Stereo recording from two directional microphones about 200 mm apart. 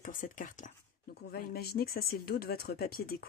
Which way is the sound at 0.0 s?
40° left (ahead or behind).